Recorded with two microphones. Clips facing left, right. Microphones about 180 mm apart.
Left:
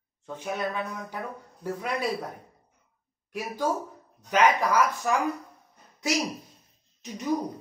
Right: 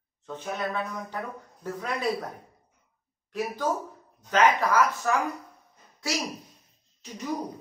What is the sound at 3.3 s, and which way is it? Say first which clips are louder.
A man's voice: even; 10° left (ahead or behind).